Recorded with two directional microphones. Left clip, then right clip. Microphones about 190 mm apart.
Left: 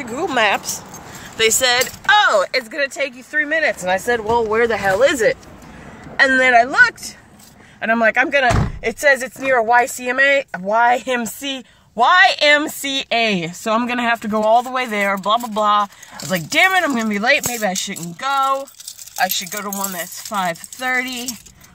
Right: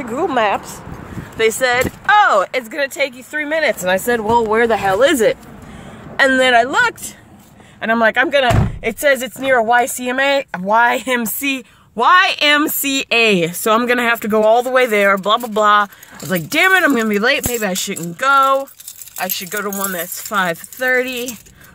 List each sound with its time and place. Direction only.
0.0 s speech: 15° right (ahead or behind)
7.8 s speech: 20° right (ahead or behind); by 21.3 s centre (ahead or behind)